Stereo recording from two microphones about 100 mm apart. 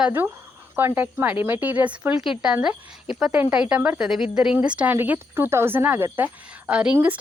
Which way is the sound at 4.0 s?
5° right (ahead or behind).